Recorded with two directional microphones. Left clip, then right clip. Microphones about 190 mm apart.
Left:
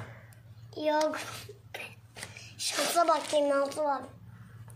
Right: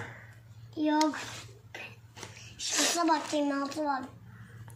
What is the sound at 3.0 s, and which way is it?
A child's voice, 50° left (ahead or behind).